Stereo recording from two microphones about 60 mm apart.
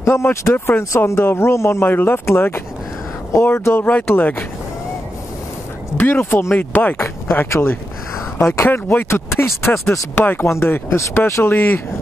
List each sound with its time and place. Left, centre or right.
0.0 s speech: left
3.8 s speech: left
5.9 s speech: left
7.0 s speech: left
8.6 s speech: left
11.4 s speech: left